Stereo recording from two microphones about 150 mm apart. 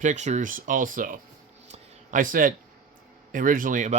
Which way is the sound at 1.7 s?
60° right (ahead or behind).